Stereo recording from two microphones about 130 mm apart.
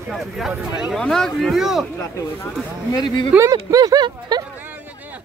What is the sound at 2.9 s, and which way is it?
Speech, 35° left (ahead or behind).